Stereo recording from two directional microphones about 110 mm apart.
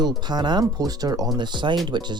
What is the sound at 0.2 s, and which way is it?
Speech, 40° right (ahead or behind).